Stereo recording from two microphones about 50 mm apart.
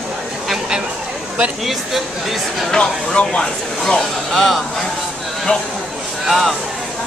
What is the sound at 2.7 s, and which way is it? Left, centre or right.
Speech, centre.